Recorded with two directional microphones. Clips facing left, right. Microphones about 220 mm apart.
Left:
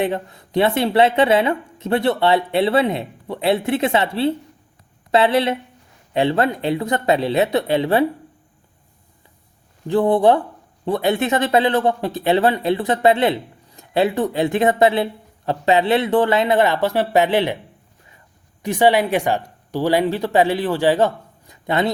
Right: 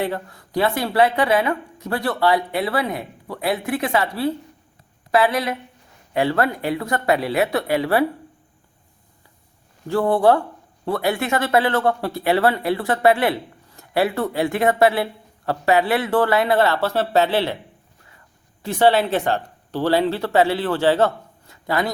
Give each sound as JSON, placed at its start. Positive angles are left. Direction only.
{"t": 0.0, "sound": "speech", "side_deg": 20}
{"t": 9.8, "sound": "speech", "side_deg": 20}
{"t": 18.6, "sound": "speech", "side_deg": 15}